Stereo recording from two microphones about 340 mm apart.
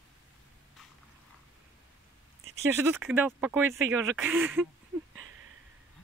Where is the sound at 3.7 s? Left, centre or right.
Right.